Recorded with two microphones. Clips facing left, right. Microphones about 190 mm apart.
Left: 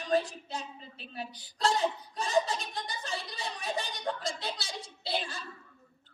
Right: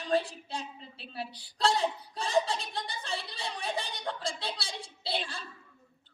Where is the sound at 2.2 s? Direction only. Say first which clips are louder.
Even; 30° right (ahead or behind).